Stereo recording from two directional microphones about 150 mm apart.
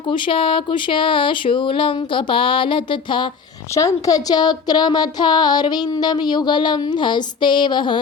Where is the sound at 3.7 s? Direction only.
20° left (ahead or behind).